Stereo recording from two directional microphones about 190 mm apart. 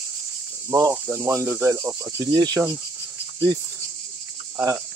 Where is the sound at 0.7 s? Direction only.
15° right (ahead or behind).